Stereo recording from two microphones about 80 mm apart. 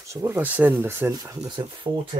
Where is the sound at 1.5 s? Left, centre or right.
Right.